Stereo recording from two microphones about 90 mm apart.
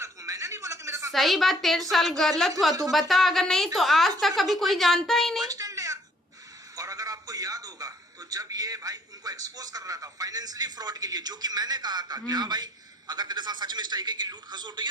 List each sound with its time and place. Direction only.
0.0 s a sound: 35° right (ahead or behind)
1.1 s a woman's voice: centre (ahead or behind)
5.5 s babbling: 40° right (ahead or behind)
6.7 s a man's voice: 40° right (ahead or behind)